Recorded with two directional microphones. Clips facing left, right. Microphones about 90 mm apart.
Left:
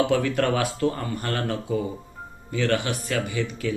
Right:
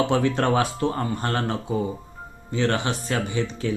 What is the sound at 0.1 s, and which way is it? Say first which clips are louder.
Speech: right 1 dB; 25° right (ahead or behind).